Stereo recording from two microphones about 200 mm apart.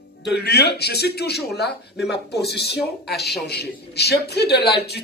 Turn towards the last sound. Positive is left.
turn(degrees=55)  # may be behind; listen again after turning